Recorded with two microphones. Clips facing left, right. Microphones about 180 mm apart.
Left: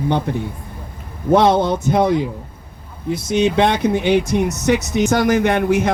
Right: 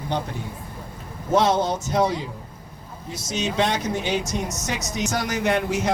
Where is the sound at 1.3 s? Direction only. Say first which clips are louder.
Left 6 dB; 60° left (ahead or behind).